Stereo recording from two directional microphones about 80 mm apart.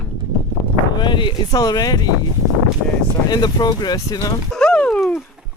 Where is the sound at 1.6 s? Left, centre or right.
Left.